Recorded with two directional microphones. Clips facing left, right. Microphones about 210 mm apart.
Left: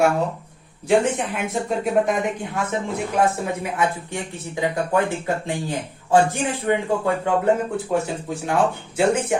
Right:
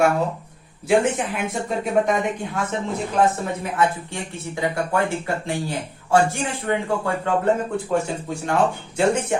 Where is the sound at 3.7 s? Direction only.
15° left (ahead or behind).